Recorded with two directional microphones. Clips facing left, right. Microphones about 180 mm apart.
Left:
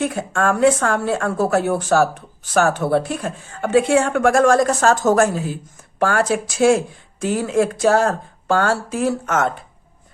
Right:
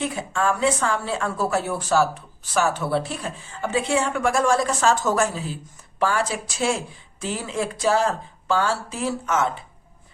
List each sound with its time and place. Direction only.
0.0 s speech: 55° left (ahead or behind)